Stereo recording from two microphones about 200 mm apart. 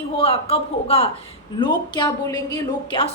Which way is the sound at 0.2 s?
30° left (ahead or behind).